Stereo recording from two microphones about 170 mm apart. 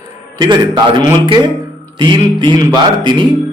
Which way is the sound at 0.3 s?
25° right (ahead or behind).